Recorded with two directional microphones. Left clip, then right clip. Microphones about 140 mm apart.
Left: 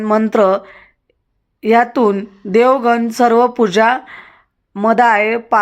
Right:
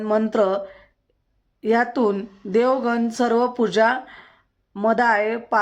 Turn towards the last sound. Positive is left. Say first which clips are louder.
# left 7 dB
turn(degrees=30)  # may be behind; listen again after turning